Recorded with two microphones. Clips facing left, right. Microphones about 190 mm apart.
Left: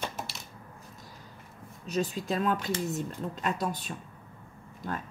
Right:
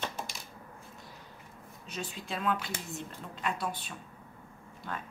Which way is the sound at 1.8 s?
40° left (ahead or behind).